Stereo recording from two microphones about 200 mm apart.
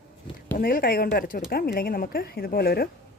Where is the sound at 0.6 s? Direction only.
45° left (ahead or behind).